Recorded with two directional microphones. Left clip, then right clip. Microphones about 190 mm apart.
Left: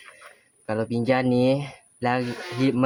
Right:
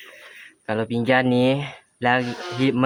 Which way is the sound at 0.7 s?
10° right (ahead or behind).